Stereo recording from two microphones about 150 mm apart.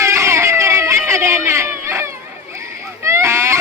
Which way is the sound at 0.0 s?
20° right (ahead or behind).